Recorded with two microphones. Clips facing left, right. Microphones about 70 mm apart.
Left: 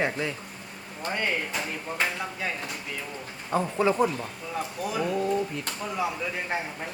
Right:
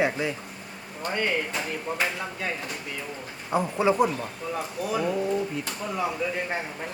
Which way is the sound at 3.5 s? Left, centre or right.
Centre.